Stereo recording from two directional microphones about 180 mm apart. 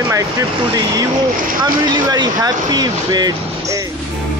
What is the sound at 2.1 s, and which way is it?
Speech, 20° right (ahead or behind).